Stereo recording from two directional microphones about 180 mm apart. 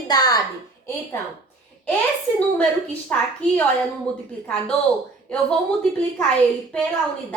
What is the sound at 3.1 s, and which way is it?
Speech, 10° left (ahead or behind).